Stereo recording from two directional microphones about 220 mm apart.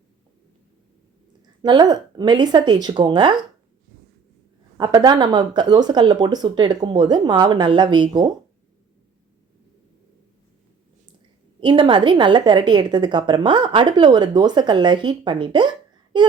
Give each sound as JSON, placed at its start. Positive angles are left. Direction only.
{"t": 1.4, "sound": "a woman's voice", "side_deg": -20}
{"t": 4.8, "sound": "a woman's voice", "side_deg": -20}
{"t": 11.6, "sound": "a woman's voice", "side_deg": -20}